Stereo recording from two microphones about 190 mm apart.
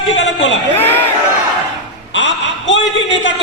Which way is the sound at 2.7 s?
80° left.